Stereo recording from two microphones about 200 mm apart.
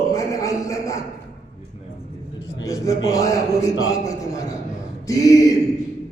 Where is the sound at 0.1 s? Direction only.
15° left (ahead or behind).